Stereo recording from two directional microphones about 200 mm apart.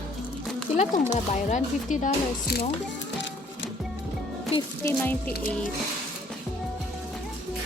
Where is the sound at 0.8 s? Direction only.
35° left (ahead or behind).